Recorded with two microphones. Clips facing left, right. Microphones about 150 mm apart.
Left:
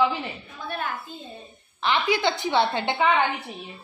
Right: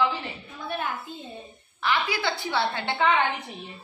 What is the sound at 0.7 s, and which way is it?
Speech, 15° right (ahead or behind).